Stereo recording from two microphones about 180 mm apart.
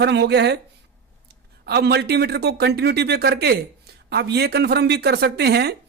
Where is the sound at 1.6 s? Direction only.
65° right (ahead or behind).